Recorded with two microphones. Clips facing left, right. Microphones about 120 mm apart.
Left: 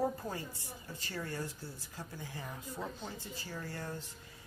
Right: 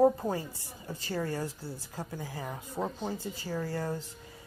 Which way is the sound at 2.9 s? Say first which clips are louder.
Right 9 dB; 30° right (ahead or behind).